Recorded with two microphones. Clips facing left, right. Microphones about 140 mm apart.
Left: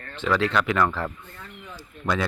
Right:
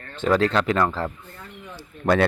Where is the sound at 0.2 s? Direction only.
40° right (ahead or behind).